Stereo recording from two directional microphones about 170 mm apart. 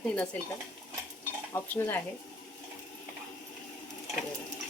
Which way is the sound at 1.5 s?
15° left (ahead or behind).